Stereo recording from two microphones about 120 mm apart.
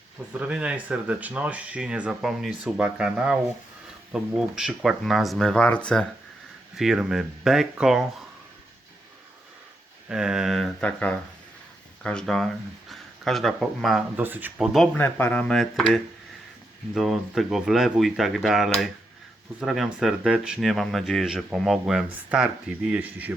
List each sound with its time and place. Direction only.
0.3 s speech: 10° right (ahead or behind); by 6.1 s 10° left (ahead or behind)
6.7 s speech: 5° right (ahead or behind)
10.1 s speech: 5° right (ahead or behind)
14.2 s speech: 15° right (ahead or behind)
14.9 s speech: 15° left (ahead or behind)
16.9 s speech: centre (ahead or behind)